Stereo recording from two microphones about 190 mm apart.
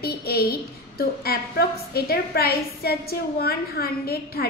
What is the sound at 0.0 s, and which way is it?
A woman's voice, 55° left (ahead or behind).